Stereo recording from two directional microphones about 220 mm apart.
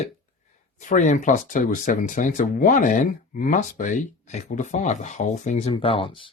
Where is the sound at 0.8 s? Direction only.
35° left (ahead or behind).